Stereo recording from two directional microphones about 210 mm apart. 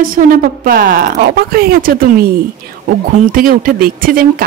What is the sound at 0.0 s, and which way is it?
Speech, 40° right (ahead or behind).